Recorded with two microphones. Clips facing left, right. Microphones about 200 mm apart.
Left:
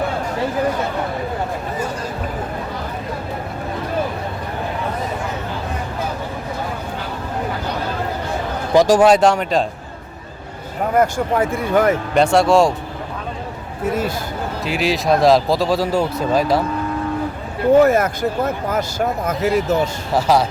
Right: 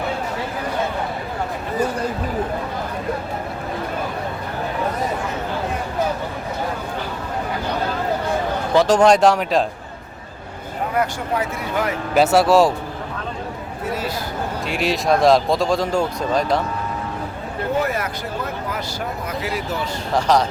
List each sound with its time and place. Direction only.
8.7 s speech: 10° left (ahead or behind)
10.9 s speech: 50° left (ahead or behind)
12.1 s speech: 5° right (ahead or behind)
14.6 s speech: centre (ahead or behind)
17.8 s speech: 45° left (ahead or behind)
20.1 s speech: 5° left (ahead or behind)